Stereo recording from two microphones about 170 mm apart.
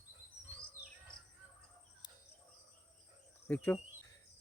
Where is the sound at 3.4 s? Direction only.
10° left (ahead or behind).